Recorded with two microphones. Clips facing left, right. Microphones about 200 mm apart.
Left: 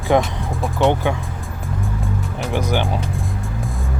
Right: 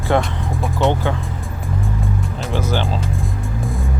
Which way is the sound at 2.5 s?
15° left (ahead or behind).